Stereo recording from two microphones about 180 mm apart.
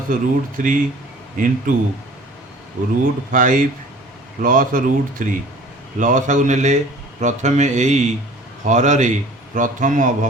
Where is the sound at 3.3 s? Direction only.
45° right (ahead or behind).